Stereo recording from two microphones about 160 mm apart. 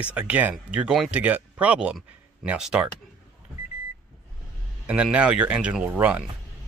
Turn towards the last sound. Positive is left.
turn(degrees=-10)  # may be behind; listen again after turning